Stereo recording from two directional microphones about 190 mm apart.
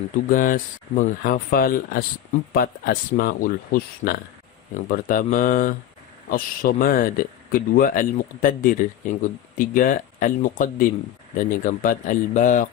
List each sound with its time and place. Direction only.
0.3 s speech: 45° left (ahead or behind)